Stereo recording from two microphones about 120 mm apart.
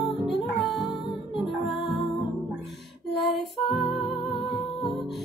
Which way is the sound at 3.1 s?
Centre (ahead or behind).